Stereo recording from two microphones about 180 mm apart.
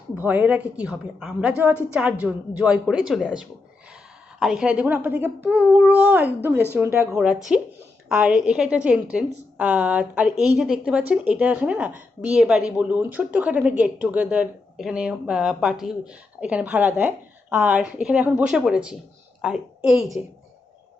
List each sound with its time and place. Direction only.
0.1 s a woman's voice: 10° right (ahead or behind)